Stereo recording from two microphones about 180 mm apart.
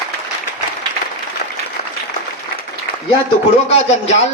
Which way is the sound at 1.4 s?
60° left (ahead or behind).